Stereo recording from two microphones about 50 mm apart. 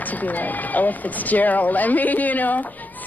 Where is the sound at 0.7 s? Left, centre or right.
Left.